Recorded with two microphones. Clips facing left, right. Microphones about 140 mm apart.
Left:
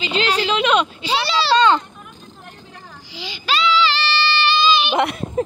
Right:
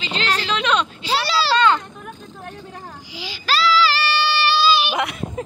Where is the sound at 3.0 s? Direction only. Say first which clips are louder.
Even; 10° right (ahead or behind).